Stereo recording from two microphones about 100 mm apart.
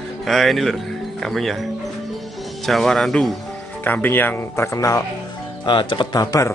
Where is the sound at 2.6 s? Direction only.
Centre (ahead or behind).